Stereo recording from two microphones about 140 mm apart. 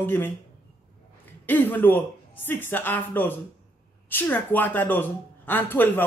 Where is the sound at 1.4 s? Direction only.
15° left (ahead or behind).